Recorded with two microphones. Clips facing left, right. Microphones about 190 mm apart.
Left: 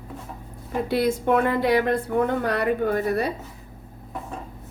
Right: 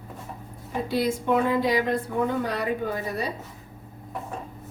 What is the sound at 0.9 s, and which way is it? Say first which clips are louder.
A woman's voice: left 3 dB; 60° left (ahead or behind).